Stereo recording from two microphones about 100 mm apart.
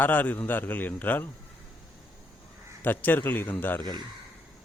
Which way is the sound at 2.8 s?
20° left (ahead or behind).